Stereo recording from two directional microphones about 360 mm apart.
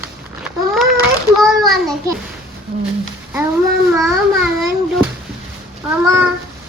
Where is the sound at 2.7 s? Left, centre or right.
Right.